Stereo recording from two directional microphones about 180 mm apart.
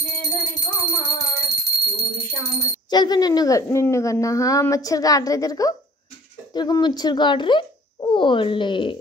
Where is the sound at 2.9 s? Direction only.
25° left (ahead or behind).